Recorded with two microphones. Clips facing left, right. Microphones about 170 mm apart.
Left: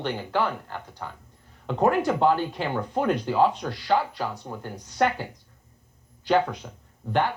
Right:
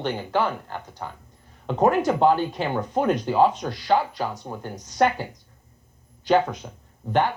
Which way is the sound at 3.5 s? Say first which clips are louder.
Right 2 dB; 45° right (ahead or behind).